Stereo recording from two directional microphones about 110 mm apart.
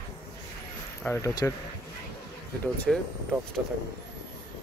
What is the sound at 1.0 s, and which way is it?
Speech, 15° left (ahead or behind).